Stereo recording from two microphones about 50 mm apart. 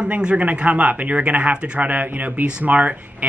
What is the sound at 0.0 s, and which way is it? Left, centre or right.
Speech, right.